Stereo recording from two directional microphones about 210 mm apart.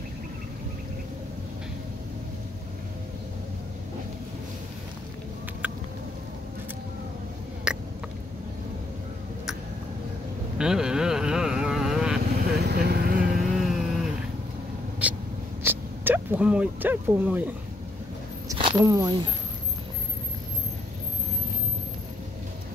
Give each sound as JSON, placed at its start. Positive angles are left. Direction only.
{"t": 7.7, "sound": "a sound", "side_deg": -5}
{"t": 10.6, "sound": "vehicle", "side_deg": -5}
{"t": 12.6, "sound": "vehicle", "side_deg": -50}
{"t": 13.6, "sound": "vehicle", "side_deg": 0}
{"t": 15.0, "sound": "cat", "side_deg": -5}
{"t": 15.6, "sound": "a sound", "side_deg": -10}
{"t": 18.5, "sound": "speech", "side_deg": -20}